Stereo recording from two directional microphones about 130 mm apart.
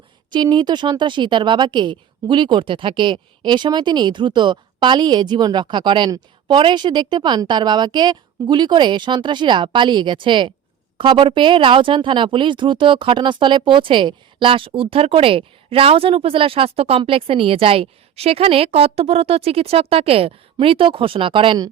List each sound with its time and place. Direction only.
0.3 s a woman's voice: 35° right (ahead or behind)